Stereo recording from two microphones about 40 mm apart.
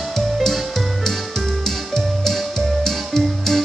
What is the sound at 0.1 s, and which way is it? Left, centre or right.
Music, centre.